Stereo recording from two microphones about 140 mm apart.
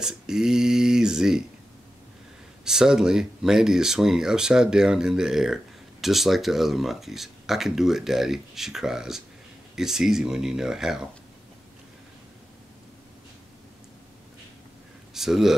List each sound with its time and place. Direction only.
0.0 s speech: 5° right (ahead or behind)
2.6 s speech: 5° right (ahead or behind)
15.1 s speech: centre (ahead or behind)